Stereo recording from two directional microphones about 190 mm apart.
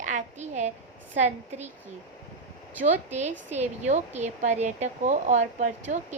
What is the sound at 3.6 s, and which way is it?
A woman's voice, 40° right (ahead or behind).